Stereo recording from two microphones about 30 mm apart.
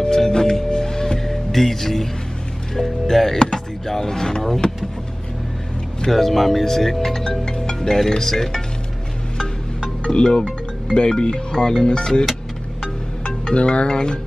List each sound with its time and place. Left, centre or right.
0.0 s music: left
1.3 s music: centre
4.6 s vehicle: left
6.1 s speech: centre
7.4 s speech: left
10.0 s music: left
11.0 s speech: left
12.8 s music: left
13.6 s speech: left
13.8 s speech: left